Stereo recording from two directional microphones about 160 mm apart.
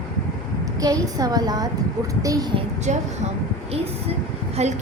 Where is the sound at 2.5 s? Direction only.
45° right (ahead or behind).